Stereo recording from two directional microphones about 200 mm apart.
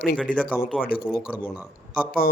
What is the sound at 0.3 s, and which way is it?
Speech, 45° left (ahead or behind).